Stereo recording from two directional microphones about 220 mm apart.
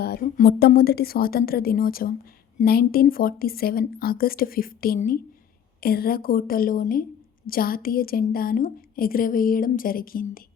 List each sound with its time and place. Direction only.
0.0 s a woman's voice: 45° left (ahead or behind)